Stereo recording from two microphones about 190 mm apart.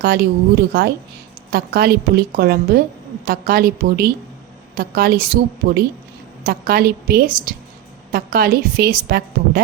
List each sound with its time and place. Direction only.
0.0 s a woman's voice: 55° right (ahead or behind)